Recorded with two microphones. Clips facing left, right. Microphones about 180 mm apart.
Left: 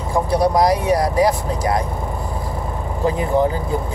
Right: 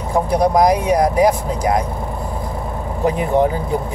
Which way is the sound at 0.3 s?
20° right (ahead or behind).